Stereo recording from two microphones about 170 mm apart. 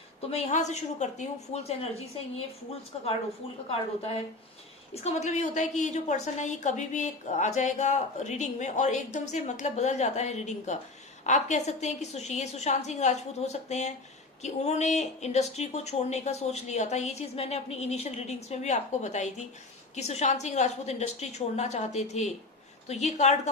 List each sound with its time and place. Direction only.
0.3 s speech: 40° left (ahead or behind)
4.9 s a woman's voice: 40° left (ahead or behind)